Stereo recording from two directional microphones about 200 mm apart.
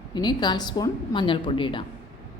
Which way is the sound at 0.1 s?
20° left (ahead or behind).